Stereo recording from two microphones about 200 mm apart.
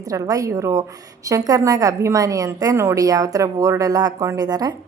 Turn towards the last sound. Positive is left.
turn(degrees=-20)  # may be behind; listen again after turning